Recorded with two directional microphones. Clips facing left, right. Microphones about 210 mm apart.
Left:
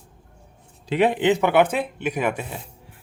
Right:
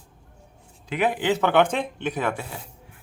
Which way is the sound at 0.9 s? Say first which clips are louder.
Left 4 dB; 30° left (ahead or behind).